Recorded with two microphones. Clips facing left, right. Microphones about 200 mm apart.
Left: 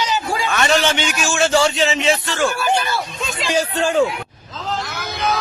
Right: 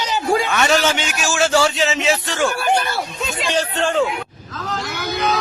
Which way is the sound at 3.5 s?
10° left (ahead or behind).